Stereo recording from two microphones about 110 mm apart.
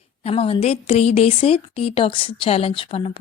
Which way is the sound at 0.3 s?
65° left (ahead or behind).